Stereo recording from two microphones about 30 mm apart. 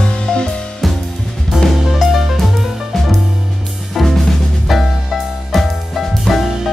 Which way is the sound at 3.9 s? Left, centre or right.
Centre.